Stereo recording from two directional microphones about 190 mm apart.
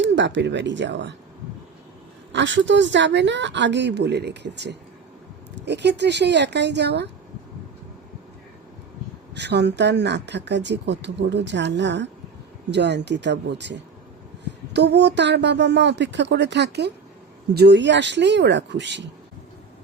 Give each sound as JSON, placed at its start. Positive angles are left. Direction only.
{"t": 0.0, "sound": "a woman's voice", "side_deg": -70}
{"t": 2.3, "sound": "a woman's voice", "side_deg": -70}
{"t": 9.3, "sound": "a woman's voice", "side_deg": -65}